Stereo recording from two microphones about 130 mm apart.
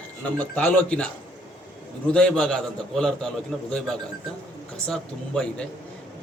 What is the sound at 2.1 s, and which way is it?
A man's voice, 5° left (ahead or behind).